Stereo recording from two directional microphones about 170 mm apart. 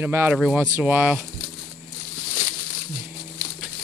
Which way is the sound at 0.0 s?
15° right (ahead or behind).